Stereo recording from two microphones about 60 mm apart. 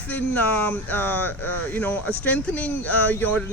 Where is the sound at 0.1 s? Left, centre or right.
Left.